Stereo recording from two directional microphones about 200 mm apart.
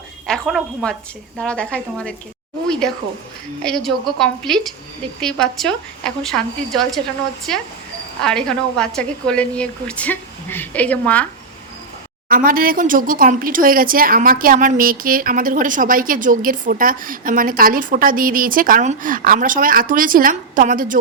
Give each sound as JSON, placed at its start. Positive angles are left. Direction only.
{"t": 0.3, "sound": "a woman's voice", "side_deg": 0}
{"t": 12.3, "sound": "speech", "side_deg": -45}